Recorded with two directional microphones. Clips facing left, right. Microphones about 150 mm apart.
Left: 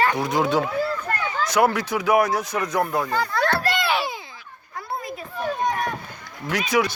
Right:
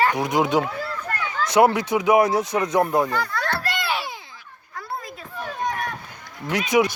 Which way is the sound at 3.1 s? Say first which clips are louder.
Left 2 dB; 30° left (ahead or behind).